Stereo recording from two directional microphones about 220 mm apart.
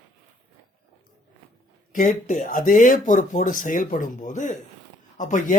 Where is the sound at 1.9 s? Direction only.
35° left (ahead or behind).